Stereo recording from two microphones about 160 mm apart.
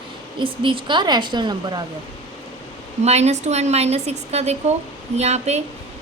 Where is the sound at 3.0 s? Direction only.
45° right (ahead or behind).